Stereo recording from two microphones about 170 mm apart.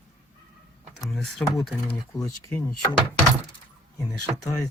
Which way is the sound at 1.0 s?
Centre (ahead or behind).